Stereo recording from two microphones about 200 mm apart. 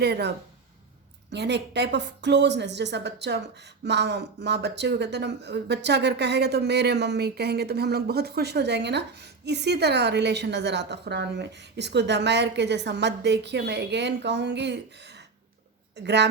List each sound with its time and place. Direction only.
0.0 s speech: 55° right (ahead or behind)